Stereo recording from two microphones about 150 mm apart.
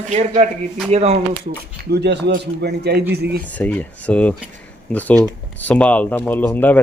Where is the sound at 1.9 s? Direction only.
90° right.